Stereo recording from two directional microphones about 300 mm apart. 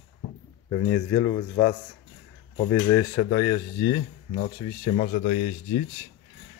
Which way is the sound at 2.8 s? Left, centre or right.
Centre.